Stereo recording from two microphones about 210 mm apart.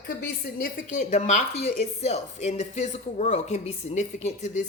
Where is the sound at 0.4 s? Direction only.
40° left (ahead or behind).